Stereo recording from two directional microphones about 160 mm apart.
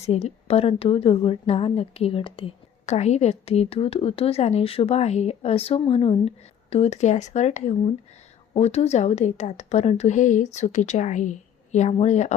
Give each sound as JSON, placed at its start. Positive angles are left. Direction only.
{"t": 0.0, "sound": "a woman's voice", "side_deg": 40}